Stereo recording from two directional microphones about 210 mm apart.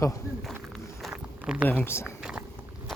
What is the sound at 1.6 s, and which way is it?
Speech, 10° left (ahead or behind).